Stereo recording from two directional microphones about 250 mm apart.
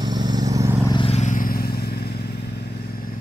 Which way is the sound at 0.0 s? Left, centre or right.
Centre.